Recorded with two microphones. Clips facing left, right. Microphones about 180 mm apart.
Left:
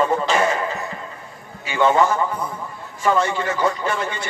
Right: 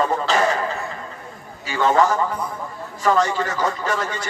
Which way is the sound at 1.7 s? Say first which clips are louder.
Left 1 dB; 40° right (ahead or behind).